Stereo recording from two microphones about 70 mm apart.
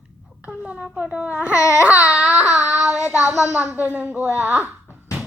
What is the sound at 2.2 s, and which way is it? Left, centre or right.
Speech, centre.